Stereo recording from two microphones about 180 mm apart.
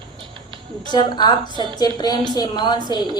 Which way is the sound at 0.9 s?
25° left (ahead or behind).